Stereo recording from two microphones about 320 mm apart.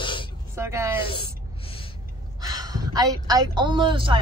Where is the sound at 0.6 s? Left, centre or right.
Centre.